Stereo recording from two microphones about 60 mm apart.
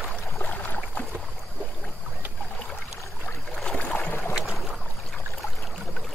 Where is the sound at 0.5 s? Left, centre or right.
Left.